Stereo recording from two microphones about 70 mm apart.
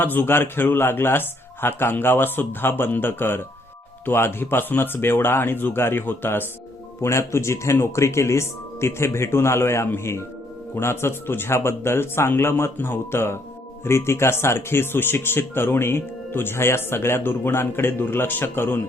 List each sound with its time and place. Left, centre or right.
0.0 s speech: left
7.0 s speech: left